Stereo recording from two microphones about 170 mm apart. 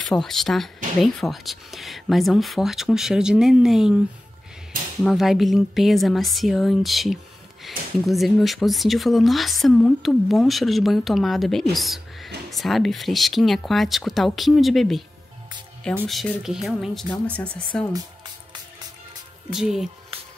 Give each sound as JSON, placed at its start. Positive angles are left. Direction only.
{"t": 0.0, "sound": "speech", "side_deg": 5}
{"t": 5.0, "sound": "speech", "side_deg": 0}
{"t": 16.1, "sound": "speech", "side_deg": 0}
{"t": 19.5, "sound": "speech", "side_deg": -5}
{"t": 20.1, "sound": "music", "side_deg": -35}